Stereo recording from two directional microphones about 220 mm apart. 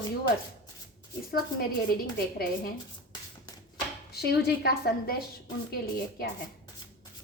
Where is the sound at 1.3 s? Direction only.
45° left (ahead or behind).